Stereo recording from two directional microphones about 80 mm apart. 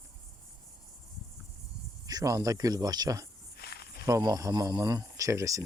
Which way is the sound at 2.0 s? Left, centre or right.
Right.